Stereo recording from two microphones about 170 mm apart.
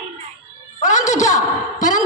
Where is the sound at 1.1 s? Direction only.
45° left (ahead or behind).